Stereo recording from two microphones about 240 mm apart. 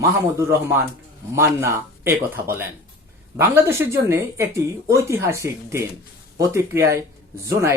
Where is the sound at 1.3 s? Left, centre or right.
Centre.